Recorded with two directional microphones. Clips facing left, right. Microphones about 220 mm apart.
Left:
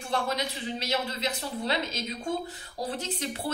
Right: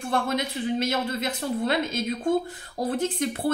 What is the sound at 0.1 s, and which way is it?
A woman's voice, 50° right (ahead or behind).